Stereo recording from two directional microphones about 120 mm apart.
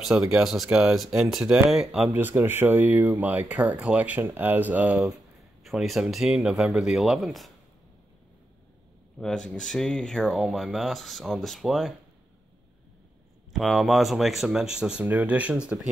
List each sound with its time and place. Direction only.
0.0 s speech: 5° right (ahead or behind)
2.1 s speech: 15° right (ahead or behind); by 7.5 s centre (ahead or behind)
9.2 s speech: 5° left (ahead or behind)
13.5 s speech: centre (ahead or behind)